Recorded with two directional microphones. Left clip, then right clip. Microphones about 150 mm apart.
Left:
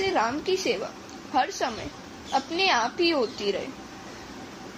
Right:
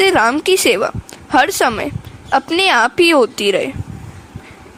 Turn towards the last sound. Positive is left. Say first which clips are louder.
# right 13 dB
turn(degrees=-75)  # may be behind; listen again after turning